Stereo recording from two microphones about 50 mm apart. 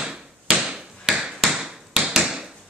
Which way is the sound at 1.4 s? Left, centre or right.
Centre.